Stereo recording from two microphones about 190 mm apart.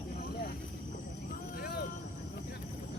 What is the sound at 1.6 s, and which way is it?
Vehicle, 55° left (ahead or behind).